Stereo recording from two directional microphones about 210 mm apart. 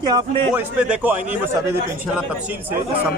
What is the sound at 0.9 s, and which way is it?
Speech, 10° right (ahead or behind).